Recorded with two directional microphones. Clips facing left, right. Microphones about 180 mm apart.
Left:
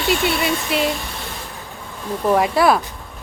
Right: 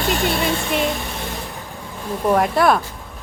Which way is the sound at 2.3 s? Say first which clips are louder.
Left 1 dB; 5° left (ahead or behind).